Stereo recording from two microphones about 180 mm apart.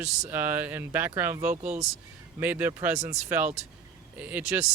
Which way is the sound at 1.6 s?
40° right (ahead or behind).